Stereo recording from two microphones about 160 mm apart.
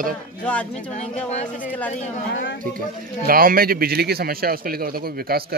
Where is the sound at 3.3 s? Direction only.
65° right (ahead or behind).